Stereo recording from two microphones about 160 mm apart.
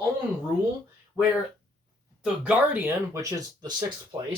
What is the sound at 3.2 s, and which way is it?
Speech, 20° right (ahead or behind).